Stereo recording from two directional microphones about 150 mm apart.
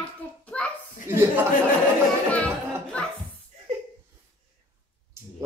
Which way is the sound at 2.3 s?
10° left (ahead or behind).